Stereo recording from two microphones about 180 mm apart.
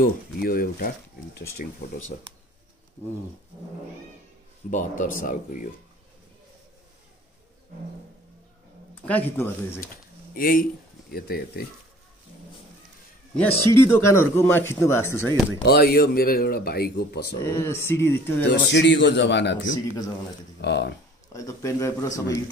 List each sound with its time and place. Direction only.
0.0 s speech: 55° left (ahead or behind)
4.6 s speech: 45° left (ahead or behind)
9.0 s speech: 10° left (ahead or behind)
10.3 s speech: 50° left (ahead or behind)
13.4 s speech: 10° left (ahead or behind)
15.6 s speech: 60° left (ahead or behind)
17.4 s speech: 15° left (ahead or behind)
18.5 s a man's voice: 75° left (ahead or behind)
20.6 s a man's voice: 70° left (ahead or behind)
21.3 s speech: 15° left (ahead or behind)